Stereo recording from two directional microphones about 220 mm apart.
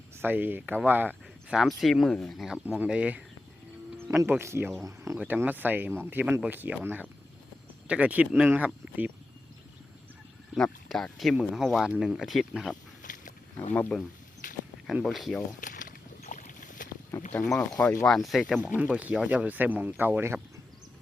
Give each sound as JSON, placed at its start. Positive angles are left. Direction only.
{"t": 0.2, "sound": "speech", "side_deg": -10}
{"t": 10.5, "sound": "speech", "side_deg": 0}
{"t": 13.0, "sound": "a sound", "side_deg": 35}
{"t": 13.7, "sound": "speech", "side_deg": 5}
{"t": 14.4, "sound": "a sound", "side_deg": 35}
{"t": 14.8, "sound": "speech", "side_deg": 0}
{"t": 15.6, "sound": "boat", "side_deg": 35}
{"t": 17.3, "sound": "speech", "side_deg": 5}